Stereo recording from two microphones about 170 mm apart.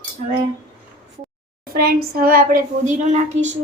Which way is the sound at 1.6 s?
60° right (ahead or behind).